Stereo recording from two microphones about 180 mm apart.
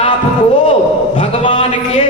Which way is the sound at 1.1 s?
30° left (ahead or behind).